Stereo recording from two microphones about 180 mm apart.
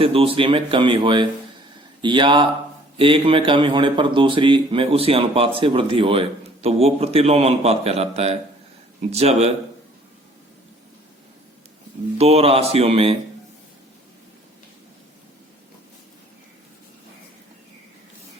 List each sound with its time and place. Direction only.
0.0 s a man's voice: 30° right (ahead or behind)
12.1 s a man's voice: 35° right (ahead or behind)